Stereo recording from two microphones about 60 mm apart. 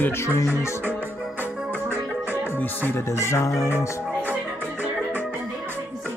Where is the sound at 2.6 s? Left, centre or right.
Left.